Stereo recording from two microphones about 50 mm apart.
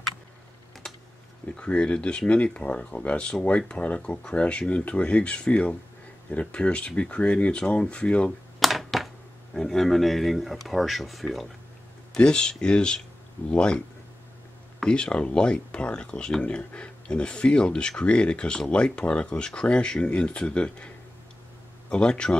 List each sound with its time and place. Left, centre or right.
1.6 s speech: left
8.5 s a sound: centre
9.5 s speech: centre
12.2 s speech: centre